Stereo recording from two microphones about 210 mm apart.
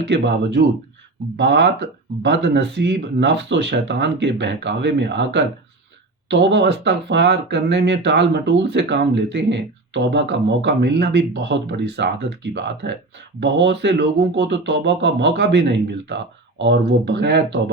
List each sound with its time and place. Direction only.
0.0 s speech: 55° right (ahead or behind)